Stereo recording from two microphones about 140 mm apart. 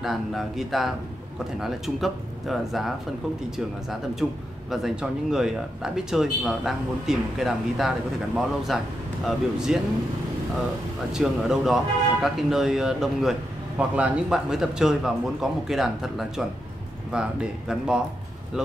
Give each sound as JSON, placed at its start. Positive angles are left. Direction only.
{"t": 0.0, "sound": "speech", "side_deg": 0}
{"t": 4.1, "sound": "speech", "side_deg": 0}
{"t": 11.1, "sound": "speech", "side_deg": -5}